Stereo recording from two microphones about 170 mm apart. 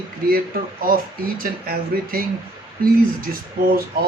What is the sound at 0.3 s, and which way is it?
A man's voice, 60° right (ahead or behind).